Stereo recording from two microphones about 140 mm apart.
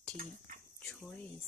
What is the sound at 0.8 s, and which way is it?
Speech, 5° left (ahead or behind).